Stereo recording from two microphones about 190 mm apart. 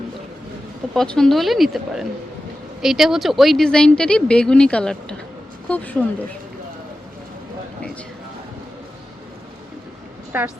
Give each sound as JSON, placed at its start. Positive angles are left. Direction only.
{"t": 0.9, "sound": "speech", "side_deg": 5}
{"t": 10.3, "sound": "a woman's voice", "side_deg": -10}